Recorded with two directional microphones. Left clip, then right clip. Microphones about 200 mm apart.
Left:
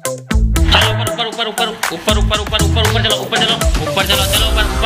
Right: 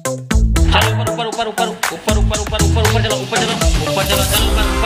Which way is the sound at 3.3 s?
30° right (ahead or behind).